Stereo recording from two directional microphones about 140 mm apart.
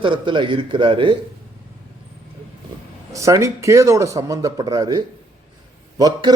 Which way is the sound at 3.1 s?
20° right (ahead or behind).